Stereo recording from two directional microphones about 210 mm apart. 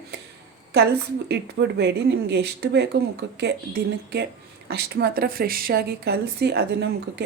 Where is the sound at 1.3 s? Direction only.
55° right (ahead or behind).